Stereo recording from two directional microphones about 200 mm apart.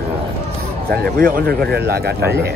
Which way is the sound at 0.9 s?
50° right (ahead or behind).